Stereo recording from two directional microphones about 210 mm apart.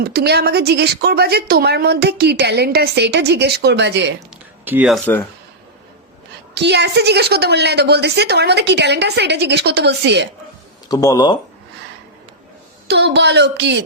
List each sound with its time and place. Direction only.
0.0 s speech: 50° right (ahead or behind)
4.6 s speech: 10° right (ahead or behind)
6.5 s speech: 55° right (ahead or behind)
10.8 s speech: 15° left (ahead or behind)
12.9 s a woman's voice: 55° right (ahead or behind)